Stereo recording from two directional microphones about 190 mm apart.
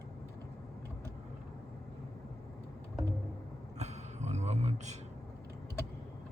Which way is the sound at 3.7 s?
35° right (ahead or behind).